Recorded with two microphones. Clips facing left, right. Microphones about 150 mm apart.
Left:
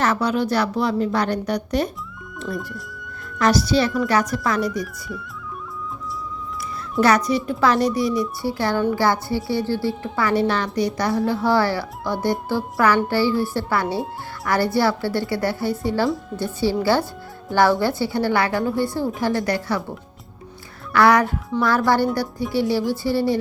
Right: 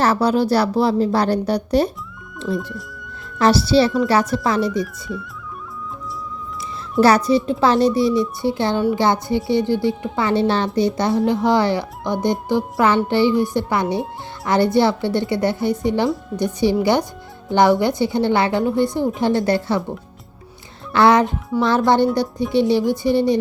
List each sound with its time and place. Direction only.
0.0 s a woman's voice: 35° right (ahead or behind)
2.6 s speech: centre (ahead or behind)
3.3 s speech: 30° right (ahead or behind)
7.0 s a woman's voice: 30° right (ahead or behind)
20.9 s speech: 25° right (ahead or behind)